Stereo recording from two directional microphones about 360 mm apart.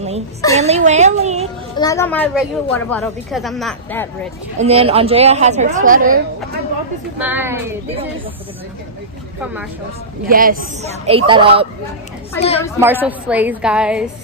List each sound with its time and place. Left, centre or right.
0.6 s music: centre
1.8 s a woman's voice: centre
4.6 s a woman's voice: centre
7.2 s a woman's voice: centre
10.2 s a woman's voice: right
12.4 s a woman's voice: centre
12.8 s a woman's voice: centre